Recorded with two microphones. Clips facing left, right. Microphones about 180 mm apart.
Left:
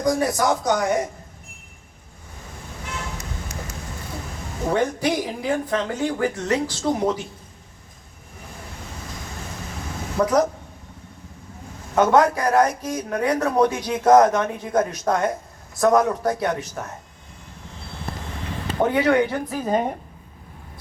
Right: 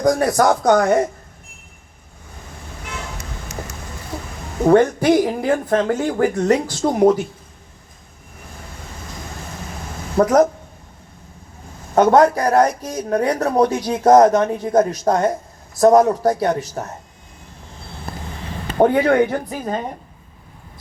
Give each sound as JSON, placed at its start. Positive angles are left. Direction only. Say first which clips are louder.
{"t": 0.0, "sound": "speech", "louder": "right 5 dB", "side_deg": -55}
{"t": 4.7, "sound": "speech", "louder": "right 8 dB", "side_deg": -50}
{"t": 10.2, "sound": "speech", "louder": "right 5 dB", "side_deg": -50}
{"t": 11.9, "sound": "speech", "louder": "right 4 dB", "side_deg": -40}
{"t": 18.8, "sound": "speech", "louder": "right 4 dB", "side_deg": -45}